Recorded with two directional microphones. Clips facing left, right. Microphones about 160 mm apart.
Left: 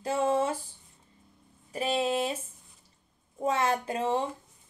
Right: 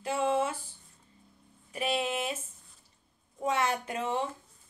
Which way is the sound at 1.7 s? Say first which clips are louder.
Left 3 dB; 35° left (ahead or behind).